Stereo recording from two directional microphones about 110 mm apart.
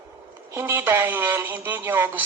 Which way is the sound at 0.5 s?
15° right (ahead or behind).